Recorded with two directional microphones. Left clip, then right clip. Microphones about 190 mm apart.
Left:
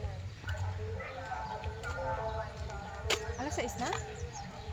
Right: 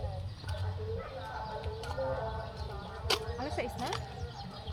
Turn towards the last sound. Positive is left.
turn(degrees=0)  # may be behind; listen again after turning